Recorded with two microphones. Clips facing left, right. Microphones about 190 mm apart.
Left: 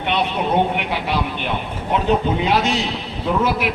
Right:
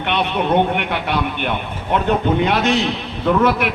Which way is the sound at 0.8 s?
60° right (ahead or behind).